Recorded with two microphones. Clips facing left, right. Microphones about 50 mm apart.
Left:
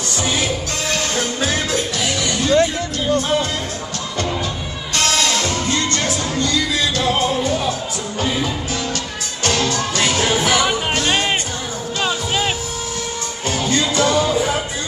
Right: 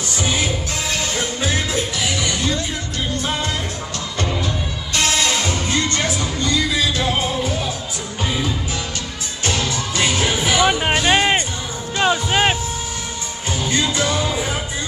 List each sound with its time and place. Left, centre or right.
0.9 s music: right
2.4 s music: left
5.0 s music: right
6.8 s music: centre
9.9 s music: centre
13.5 s music: centre